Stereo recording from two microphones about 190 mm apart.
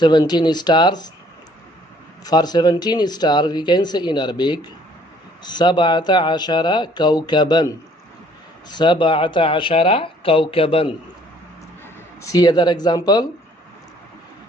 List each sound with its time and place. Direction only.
0.0 s speech: 20° left (ahead or behind)
2.2 s speech: 20° left (ahead or behind)
8.7 s speech: 25° left (ahead or behind)
12.2 s speech: 20° left (ahead or behind)